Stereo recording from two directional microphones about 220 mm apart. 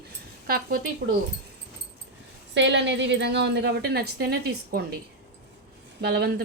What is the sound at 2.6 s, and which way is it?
A woman's voice, 55° right (ahead or behind).